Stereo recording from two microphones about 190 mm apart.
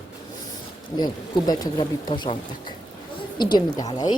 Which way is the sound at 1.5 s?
20° left (ahead or behind).